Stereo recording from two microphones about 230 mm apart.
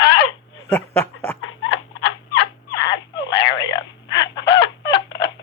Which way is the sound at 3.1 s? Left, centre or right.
Left.